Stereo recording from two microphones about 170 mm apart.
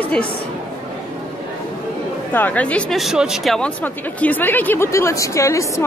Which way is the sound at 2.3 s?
10° left (ahead or behind).